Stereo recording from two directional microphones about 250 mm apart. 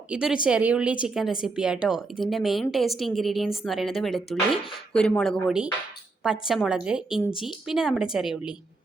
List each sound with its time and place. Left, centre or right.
0.1 s speech: centre